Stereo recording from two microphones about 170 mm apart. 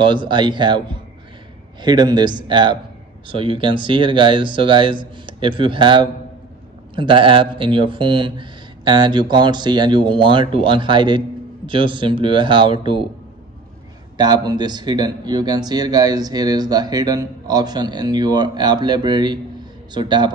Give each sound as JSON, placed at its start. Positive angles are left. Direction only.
{"t": 0.0, "sound": "speech", "side_deg": -30}
{"t": 14.1, "sound": "speech", "side_deg": -25}